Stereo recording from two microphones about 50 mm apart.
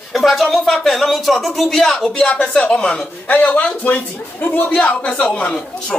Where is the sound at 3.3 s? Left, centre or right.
Left.